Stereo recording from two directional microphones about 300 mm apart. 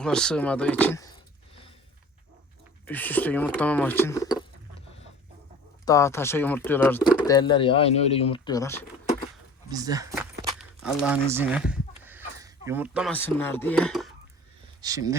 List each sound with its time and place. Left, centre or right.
0.0 s a sound: centre
2.8 s speech: centre
5.8 s speech: centre
7.3 s speech: centre
9.6 s speech: centre
14.8 s speech: centre